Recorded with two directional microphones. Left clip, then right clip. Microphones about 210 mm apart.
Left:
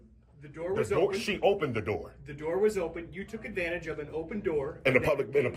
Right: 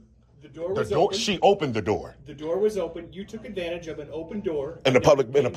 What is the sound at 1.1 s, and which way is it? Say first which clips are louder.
Speech: right 5 dB; 90° right.